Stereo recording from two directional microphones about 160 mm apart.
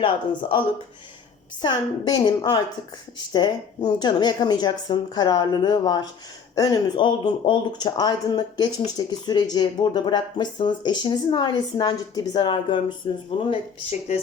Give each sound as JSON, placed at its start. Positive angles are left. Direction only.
{"t": 0.0, "sound": "speech", "side_deg": 35}
{"t": 1.6, "sound": "speech", "side_deg": 25}